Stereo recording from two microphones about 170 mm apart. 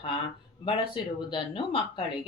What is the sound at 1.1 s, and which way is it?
Speech, 30° left (ahead or behind).